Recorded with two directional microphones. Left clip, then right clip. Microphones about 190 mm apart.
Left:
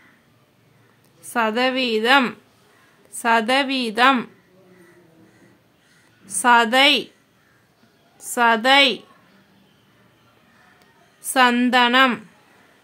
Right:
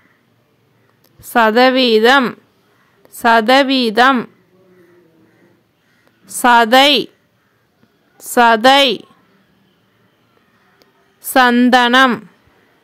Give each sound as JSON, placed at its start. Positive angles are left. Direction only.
{"t": 1.3, "sound": "a woman's voice", "side_deg": -35}
{"t": 6.2, "sound": "a woman's voice", "side_deg": -40}
{"t": 8.2, "sound": "a woman's voice", "side_deg": -40}
{"t": 10.8, "sound": "a sound", "side_deg": -35}
{"t": 11.7, "sound": "a woman's voice", "side_deg": -40}